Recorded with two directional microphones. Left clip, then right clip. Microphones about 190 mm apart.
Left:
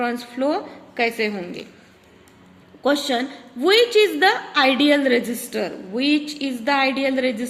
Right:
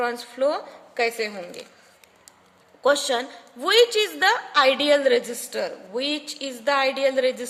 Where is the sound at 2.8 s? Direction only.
55° right (ahead or behind).